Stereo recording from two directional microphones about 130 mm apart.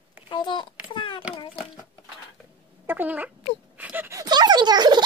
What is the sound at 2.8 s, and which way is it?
Cat, 15° right (ahead or behind).